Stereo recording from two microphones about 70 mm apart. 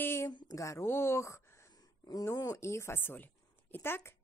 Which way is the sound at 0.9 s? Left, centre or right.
Left.